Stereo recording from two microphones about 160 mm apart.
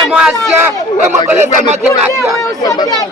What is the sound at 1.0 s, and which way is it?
Speech, 45° right (ahead or behind).